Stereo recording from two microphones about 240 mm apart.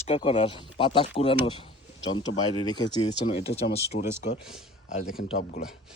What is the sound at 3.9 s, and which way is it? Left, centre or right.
Speech, left.